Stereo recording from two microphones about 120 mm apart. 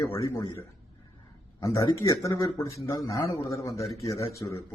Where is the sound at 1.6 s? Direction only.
25° left (ahead or behind).